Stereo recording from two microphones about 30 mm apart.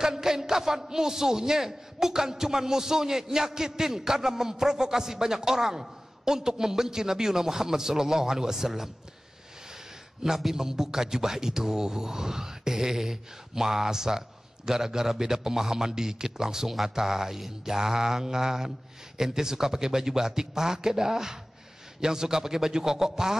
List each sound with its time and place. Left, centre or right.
0.0 s a man's voice: centre
10.2 s a man's voice: centre